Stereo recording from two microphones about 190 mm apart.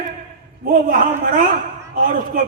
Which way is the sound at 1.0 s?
45° right (ahead or behind).